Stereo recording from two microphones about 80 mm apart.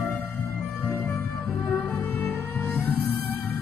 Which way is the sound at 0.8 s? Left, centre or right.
Left.